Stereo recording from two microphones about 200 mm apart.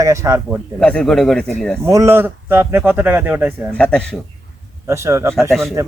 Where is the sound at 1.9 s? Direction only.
15° right (ahead or behind).